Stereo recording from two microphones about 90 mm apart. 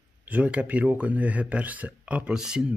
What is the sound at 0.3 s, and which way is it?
Speech, 15° right (ahead or behind).